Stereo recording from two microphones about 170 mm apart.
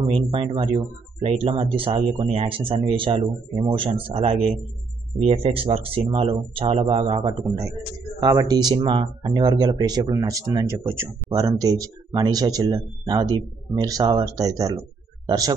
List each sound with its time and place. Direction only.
0.1 s speech: 35° right (ahead or behind)
11.0 s speech: 15° right (ahead or behind)